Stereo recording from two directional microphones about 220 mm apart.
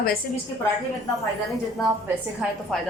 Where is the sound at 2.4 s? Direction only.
5° right (ahead or behind).